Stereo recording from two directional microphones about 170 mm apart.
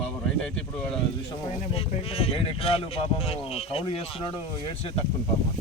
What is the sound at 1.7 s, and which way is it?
Speech, 35° left (ahead or behind).